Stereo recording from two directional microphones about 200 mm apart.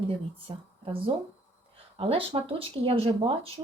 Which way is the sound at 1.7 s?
30° right (ahead or behind).